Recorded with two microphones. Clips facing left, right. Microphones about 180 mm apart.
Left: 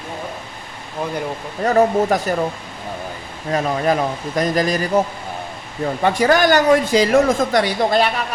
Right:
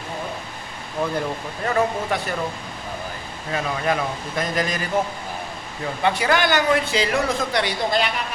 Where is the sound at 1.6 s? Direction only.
40° left (ahead or behind).